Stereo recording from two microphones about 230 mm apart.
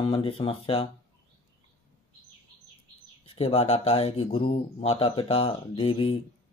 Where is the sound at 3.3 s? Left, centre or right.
Left.